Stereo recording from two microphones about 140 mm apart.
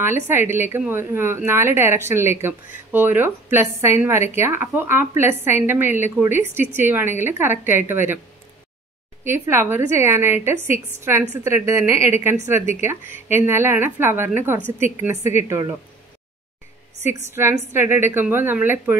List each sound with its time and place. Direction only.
0.0 s speech: 15° right (ahead or behind)
9.2 s a woman's voice: 15° right (ahead or behind)
17.2 s speech: 20° right (ahead or behind)